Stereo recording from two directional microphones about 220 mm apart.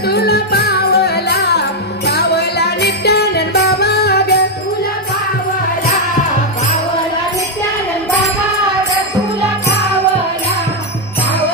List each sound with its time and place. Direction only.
0.0 s music: 45° left (ahead or behind)